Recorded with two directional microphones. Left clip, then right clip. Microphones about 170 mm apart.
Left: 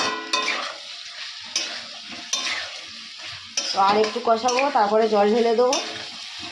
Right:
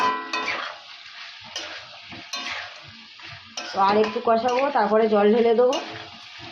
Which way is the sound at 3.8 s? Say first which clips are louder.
Even; 5° right (ahead or behind).